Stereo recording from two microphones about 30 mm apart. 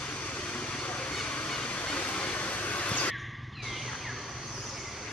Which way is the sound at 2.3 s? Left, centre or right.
Left.